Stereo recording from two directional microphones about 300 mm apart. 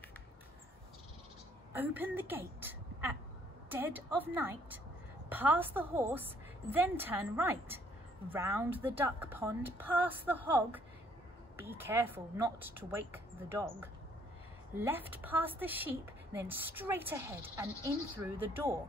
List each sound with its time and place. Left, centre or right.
1.7 s speech: centre
3.7 s speech: centre